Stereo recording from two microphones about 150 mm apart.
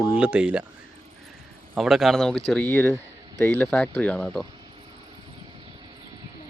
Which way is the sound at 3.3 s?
20° left (ahead or behind).